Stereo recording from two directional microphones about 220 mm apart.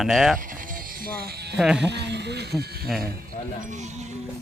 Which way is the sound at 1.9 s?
50° right (ahead or behind).